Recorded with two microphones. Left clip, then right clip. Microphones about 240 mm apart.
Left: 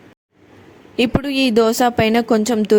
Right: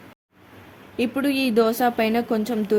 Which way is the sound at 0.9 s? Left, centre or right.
Left.